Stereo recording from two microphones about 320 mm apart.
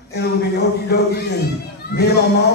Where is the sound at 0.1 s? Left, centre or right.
Left.